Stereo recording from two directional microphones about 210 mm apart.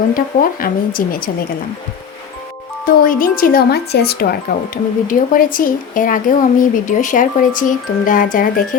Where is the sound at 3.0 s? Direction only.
40° left (ahead or behind).